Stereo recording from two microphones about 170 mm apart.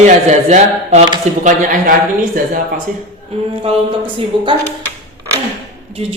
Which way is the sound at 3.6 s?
30° right (ahead or behind).